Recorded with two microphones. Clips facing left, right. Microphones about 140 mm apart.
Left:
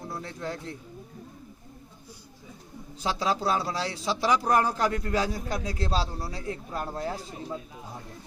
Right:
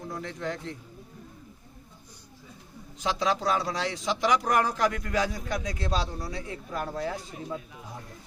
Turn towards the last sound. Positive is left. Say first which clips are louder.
# even
turn(degrees=30)  # may be behind; listen again after turning